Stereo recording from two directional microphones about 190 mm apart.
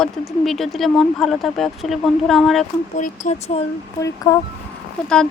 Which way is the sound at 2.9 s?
40° left (ahead or behind).